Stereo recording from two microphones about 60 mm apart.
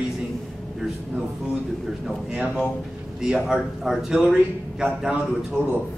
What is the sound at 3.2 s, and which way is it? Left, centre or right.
A man's voice, centre.